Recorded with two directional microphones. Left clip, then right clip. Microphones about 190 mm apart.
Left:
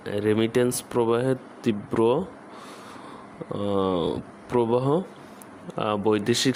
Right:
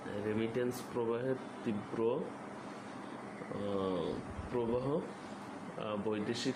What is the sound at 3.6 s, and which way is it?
Speech, 70° left (ahead or behind).